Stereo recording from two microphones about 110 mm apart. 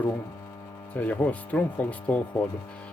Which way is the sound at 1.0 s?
15° left (ahead or behind).